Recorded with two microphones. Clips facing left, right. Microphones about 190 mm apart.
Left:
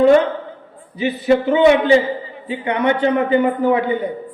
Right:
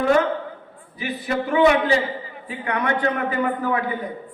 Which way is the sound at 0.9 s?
25° left (ahead or behind).